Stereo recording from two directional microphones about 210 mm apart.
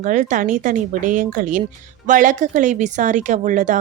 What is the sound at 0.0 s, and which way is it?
Speech, 35° right (ahead or behind).